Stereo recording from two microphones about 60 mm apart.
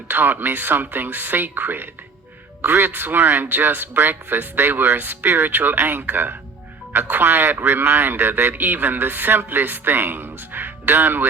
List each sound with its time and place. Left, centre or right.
0.1 s a man's voice: right